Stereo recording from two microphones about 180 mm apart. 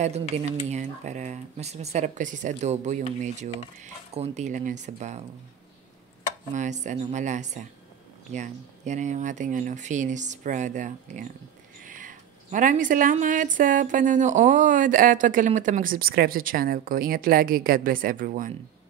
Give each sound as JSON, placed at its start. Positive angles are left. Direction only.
{"t": 0.0, "sound": "speech", "side_deg": -35}
{"t": 6.5, "sound": "a woman's voice", "side_deg": -40}